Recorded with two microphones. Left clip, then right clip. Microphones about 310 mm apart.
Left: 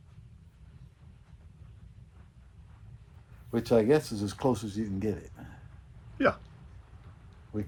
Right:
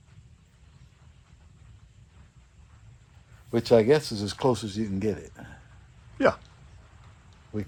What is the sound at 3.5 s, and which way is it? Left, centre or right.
Speech, right.